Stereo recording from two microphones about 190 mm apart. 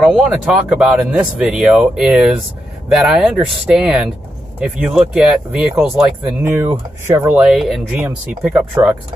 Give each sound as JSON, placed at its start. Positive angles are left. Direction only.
{"t": 0.0, "sound": "speech", "side_deg": -5}